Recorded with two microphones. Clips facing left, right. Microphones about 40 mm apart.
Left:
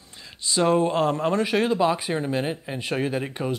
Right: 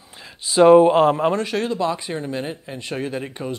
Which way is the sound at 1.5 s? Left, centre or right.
Centre.